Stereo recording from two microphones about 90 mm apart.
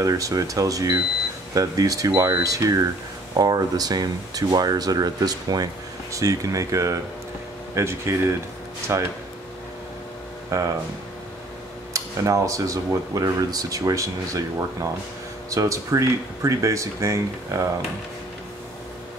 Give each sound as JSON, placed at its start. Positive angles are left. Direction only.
{"t": 0.0, "sound": "speech", "side_deg": -40}
{"t": 10.5, "sound": "speech", "side_deg": -40}
{"t": 11.9, "sound": "speech", "side_deg": -40}